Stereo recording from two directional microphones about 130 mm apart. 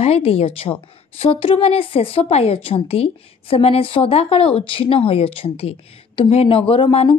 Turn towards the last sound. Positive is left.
turn(degrees=45)  # may be behind; listen again after turning